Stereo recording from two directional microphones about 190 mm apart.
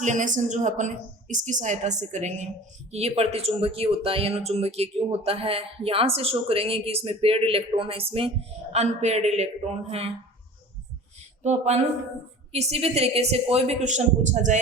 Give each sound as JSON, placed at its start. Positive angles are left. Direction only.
{"t": 0.0, "sound": "speech", "side_deg": -40}
{"t": 11.4, "sound": "speech", "side_deg": -35}